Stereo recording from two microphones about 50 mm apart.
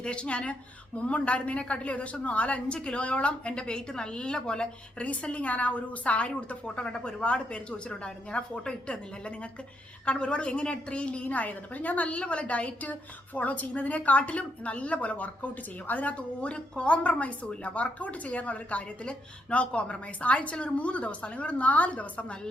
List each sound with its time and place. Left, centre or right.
0.0 s a woman's voice: left